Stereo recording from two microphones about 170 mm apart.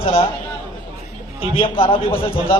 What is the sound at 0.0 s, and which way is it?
Speech, 35° left (ahead or behind).